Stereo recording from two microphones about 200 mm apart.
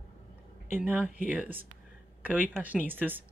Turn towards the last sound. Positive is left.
turn(degrees=-10)  # may be behind; listen again after turning